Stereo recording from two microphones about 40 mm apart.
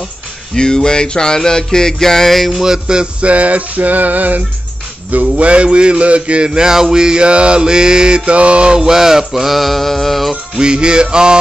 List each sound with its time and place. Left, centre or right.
0.6 s music: centre
2.5 s speech: centre
3.2 s male singing: right
5.1 s a man's voice: right; by 10.3 s centre
10.3 s a man's voice: right